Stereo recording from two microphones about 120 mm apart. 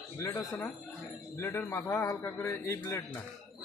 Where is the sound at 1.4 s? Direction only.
20° left (ahead or behind).